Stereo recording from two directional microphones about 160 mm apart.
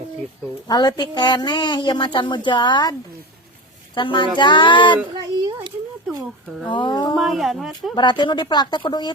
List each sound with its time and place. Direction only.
0.7 s speech: 25° left (ahead or behind)
3.9 s speech: 30° left (ahead or behind)
6.7 s speech: 30° left (ahead or behind)
7.2 s speech: centre (ahead or behind)
7.9 s speech: 30° left (ahead or behind)